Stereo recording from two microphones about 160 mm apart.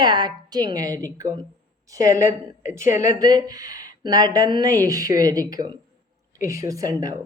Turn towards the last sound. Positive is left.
turn(degrees=-20)  # may be behind; listen again after turning